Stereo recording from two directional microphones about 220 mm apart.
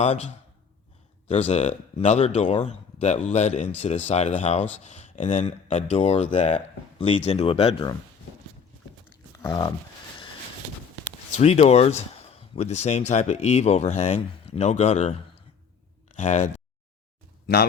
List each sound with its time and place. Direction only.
0.0 s speech: 30° left (ahead or behind)
9.4 s speech: 15° left (ahead or behind)
11.3 s speech: 30° left (ahead or behind)
16.1 s speech: 30° left (ahead or behind)